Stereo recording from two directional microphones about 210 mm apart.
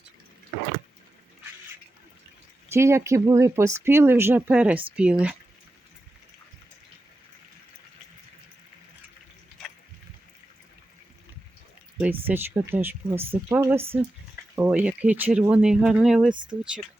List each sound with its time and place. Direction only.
2.6 s speech: 15° right (ahead or behind)
12.3 s speech: 10° right (ahead or behind)
16.3 s speech: 20° right (ahead or behind)